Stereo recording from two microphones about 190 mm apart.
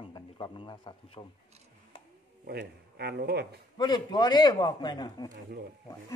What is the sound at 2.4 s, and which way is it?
Speech, 55° right (ahead or behind).